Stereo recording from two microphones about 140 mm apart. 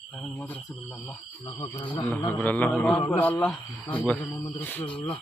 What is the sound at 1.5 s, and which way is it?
Speech, 25° left (ahead or behind).